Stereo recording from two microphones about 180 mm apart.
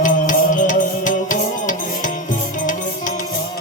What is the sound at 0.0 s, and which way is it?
Music, 45° left (ahead or behind).